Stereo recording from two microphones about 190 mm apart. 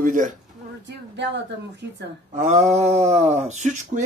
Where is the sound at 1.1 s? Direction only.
65° right (ahead or behind).